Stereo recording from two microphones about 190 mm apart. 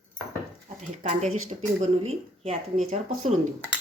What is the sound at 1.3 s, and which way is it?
Speech, 90° right.